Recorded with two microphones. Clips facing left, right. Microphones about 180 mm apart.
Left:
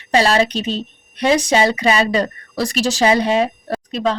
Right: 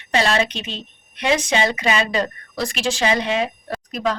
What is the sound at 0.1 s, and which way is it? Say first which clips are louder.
A woman's voice: left 4 dB; 35° left (ahead or behind).